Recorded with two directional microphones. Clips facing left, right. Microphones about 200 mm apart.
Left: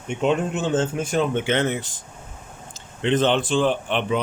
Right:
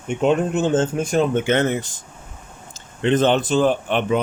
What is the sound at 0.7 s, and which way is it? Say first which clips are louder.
Speech: right 1 dB; 45° right (ahead or behind).